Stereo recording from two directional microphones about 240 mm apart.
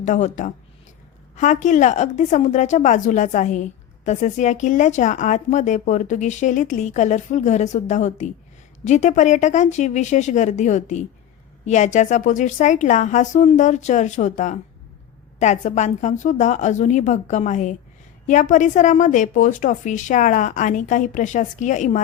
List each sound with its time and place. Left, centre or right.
0.0 s a woman's voice: left